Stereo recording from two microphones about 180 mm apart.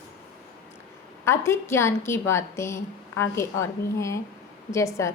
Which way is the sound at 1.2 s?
15° left (ahead or behind).